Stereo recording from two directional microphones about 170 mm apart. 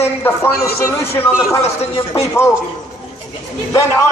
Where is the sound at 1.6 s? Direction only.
40° left (ahead or behind).